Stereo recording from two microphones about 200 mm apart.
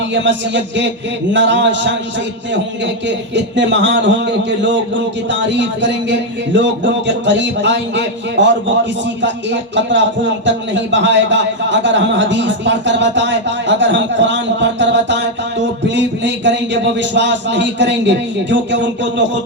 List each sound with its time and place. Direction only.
0.1 s a man's voice: 65° right (ahead or behind)
3.3 s a man's voice: 65° right (ahead or behind)